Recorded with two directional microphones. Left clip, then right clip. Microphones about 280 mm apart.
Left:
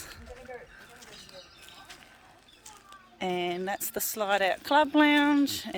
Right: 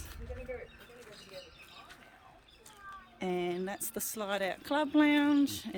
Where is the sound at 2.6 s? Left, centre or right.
Left.